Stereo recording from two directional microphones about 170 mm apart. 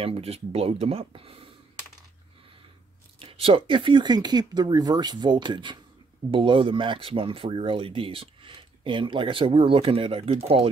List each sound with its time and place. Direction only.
0.0 s speech: 35° right (ahead or behind)
3.2 s speech: 30° right (ahead or behind)